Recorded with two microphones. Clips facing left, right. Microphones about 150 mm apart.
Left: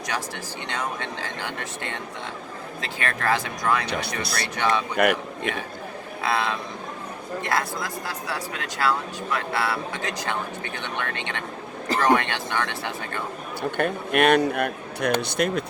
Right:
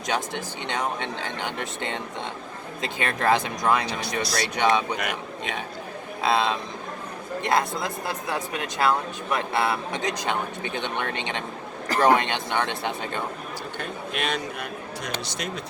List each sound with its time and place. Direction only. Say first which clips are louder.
0.1 s speech: right 4 dB; 20° right (ahead or behind)
3.8 s speech: even; 65° left (ahead or behind)
4.5 s speech: right 2 dB; 20° right (ahead or behind)
5.0 s speech: left 10 dB; 60° left (ahead or behind)
6.2 s speech: right 2 dB; 20° right (ahead or behind)
13.6 s speech: left 13 dB; 60° left (ahead or behind)